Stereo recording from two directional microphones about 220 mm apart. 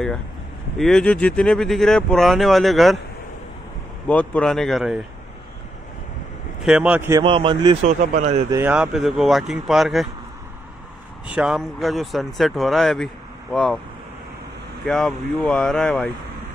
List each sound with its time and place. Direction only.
0.7 s speech: centre (ahead or behind)
4.1 s speech: 5° left (ahead or behind)
6.6 s speech: 5° right (ahead or behind)
7.2 s speech: 20° right (ahead or behind)
8.5 s speech: 10° right (ahead or behind)
11.2 s speech: 5° right (ahead or behind)
14.9 s speech: centre (ahead or behind)